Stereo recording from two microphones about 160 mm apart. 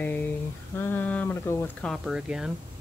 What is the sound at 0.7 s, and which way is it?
Speech, 10° left (ahead or behind).